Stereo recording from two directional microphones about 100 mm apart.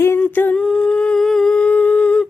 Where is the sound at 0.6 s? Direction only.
5° left (ahead or behind).